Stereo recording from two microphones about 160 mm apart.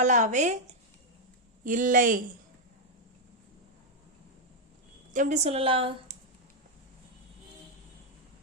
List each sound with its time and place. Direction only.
0.0 s speech: 50° right (ahead or behind)
5.1 s a woman's voice: 50° right (ahead or behind)